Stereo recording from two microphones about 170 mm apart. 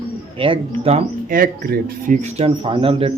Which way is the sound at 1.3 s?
55° right (ahead or behind).